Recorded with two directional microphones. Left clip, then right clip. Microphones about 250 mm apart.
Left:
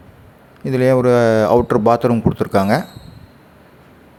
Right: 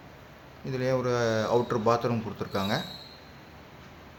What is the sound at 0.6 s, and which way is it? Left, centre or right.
A man's voice, left.